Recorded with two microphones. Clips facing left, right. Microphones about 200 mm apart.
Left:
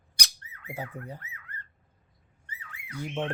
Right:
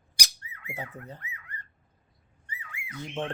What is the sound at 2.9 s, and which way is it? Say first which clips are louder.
Speech: left 2 dB; 10° left (ahead or behind).